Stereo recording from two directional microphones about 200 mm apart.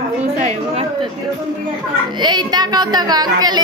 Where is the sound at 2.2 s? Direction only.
20° right (ahead or behind).